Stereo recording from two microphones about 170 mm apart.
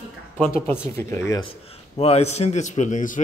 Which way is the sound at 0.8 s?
15° left (ahead or behind).